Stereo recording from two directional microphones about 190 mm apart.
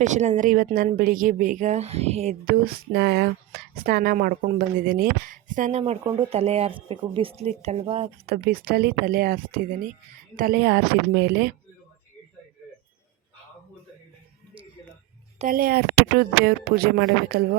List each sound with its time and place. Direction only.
0.0 s a woman's voice: 40° right (ahead or behind)
2.5 s speech: 60° right (ahead or behind); by 5.8 s 40° right (ahead or behind)
6.3 s a woman's voice: 30° right (ahead or behind)
8.3 s a woman's voice: 50° right (ahead or behind)
15.4 s speech: 50° right (ahead or behind)